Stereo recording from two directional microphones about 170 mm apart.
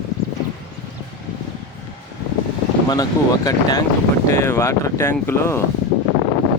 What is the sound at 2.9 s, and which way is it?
Speech, 20° left (ahead or behind).